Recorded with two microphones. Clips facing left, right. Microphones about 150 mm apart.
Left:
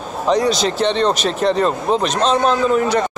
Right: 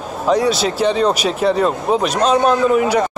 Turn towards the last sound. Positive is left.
turn(degrees=-10)  # may be behind; listen again after turning